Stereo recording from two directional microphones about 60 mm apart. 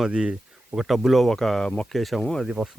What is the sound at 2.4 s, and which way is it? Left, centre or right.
Speech, centre.